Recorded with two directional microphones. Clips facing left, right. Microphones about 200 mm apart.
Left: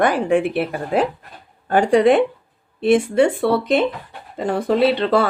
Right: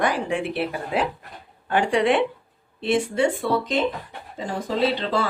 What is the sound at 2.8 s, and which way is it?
Speech, 55° left (ahead or behind).